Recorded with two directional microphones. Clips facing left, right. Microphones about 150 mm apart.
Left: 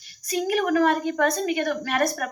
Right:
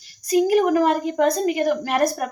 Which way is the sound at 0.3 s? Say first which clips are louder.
Right 6 dB; 35° right (ahead or behind).